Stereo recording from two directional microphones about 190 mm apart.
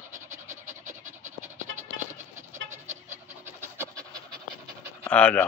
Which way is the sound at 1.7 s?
40° right (ahead or behind).